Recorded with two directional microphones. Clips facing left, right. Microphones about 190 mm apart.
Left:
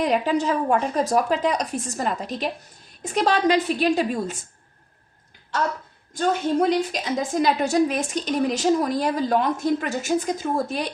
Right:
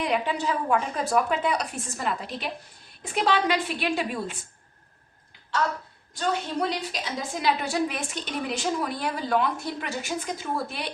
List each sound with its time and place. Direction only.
0.0 s a woman's voice: 40° left (ahead or behind)
6.1 s a woman's voice: 45° left (ahead or behind)